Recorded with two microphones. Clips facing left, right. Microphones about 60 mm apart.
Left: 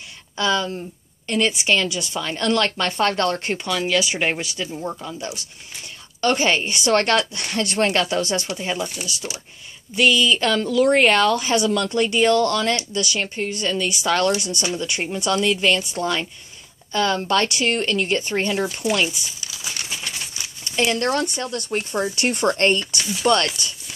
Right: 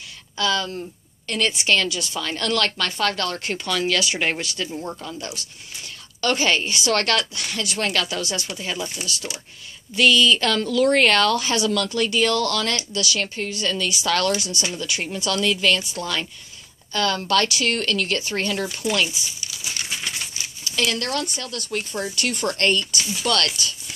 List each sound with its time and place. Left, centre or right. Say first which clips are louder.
0.4 s speech: left 2 dB; centre
3.6 s speech: even; centre
7.3 s speech: left 5 dB; left
8.5 s speech: left 3 dB; centre
20.7 s speech: left 4 dB; left